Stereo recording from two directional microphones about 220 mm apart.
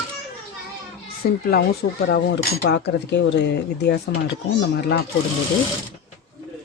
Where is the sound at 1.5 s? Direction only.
45° left (ahead or behind).